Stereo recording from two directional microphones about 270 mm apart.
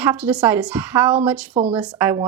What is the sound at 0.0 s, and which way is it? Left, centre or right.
Speech, centre.